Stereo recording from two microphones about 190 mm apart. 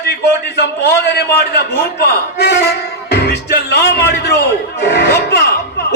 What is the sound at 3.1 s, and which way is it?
Music, 60° left (ahead or behind).